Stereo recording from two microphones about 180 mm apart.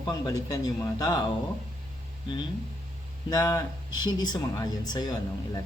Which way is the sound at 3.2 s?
25° left (ahead or behind).